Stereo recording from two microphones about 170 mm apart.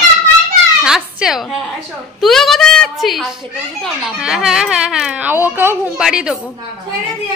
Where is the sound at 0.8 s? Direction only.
5° right (ahead or behind).